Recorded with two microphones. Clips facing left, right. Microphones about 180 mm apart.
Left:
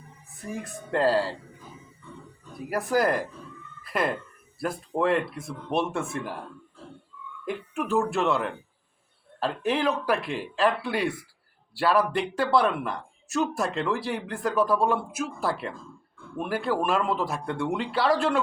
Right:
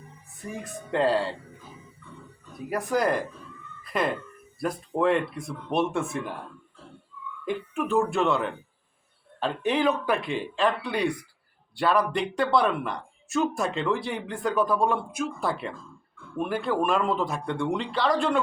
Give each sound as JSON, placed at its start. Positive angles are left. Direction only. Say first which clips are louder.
{"t": 0.5, "sound": "speech", "louder": "even", "side_deg": 0}
{"t": 2.6, "sound": "speech", "louder": "left 1 dB", "side_deg": 5}
{"t": 7.4, "sound": "speech", "louder": "right 2 dB", "side_deg": 0}